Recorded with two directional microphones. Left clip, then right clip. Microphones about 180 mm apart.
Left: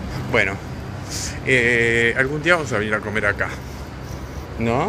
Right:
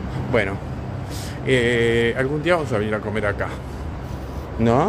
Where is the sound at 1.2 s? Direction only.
15° right (ahead or behind).